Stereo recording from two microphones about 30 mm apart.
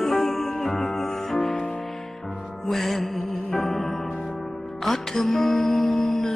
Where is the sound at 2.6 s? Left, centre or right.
Centre.